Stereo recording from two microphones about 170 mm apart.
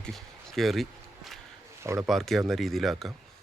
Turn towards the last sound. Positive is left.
turn(degrees=0)  # may be behind; listen again after turning